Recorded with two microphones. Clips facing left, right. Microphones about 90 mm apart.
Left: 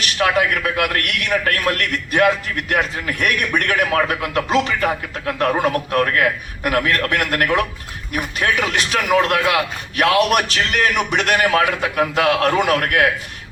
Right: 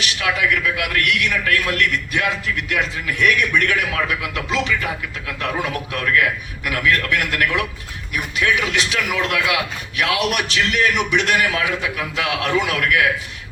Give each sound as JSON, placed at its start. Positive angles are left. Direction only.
{"t": 0.0, "sound": "a man's voice", "side_deg": 45}